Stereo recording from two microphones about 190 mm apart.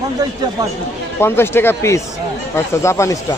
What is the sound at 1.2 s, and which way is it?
A man's voice, 10° left (ahead or behind).